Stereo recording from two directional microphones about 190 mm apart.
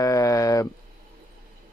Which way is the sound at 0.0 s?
15° left (ahead or behind).